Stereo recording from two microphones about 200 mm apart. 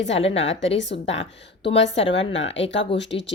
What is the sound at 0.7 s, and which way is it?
Speech, 65° left (ahead or behind).